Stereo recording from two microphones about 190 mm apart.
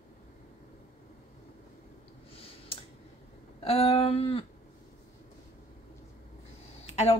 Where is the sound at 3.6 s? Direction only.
30° left (ahead or behind).